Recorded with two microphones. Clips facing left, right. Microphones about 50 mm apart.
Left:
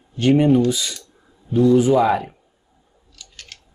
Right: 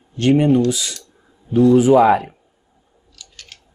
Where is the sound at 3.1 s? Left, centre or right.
Centre.